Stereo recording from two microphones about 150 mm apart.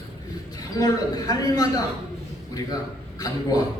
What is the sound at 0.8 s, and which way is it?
Speech, 25° left (ahead or behind).